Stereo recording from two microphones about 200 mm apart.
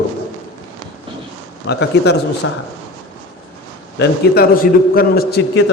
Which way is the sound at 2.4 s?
90° left.